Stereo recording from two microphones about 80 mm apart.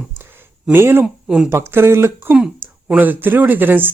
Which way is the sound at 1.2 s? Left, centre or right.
Centre.